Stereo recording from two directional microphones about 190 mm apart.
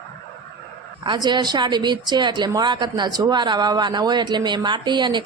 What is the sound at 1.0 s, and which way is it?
A woman's voice, 25° right (ahead or behind).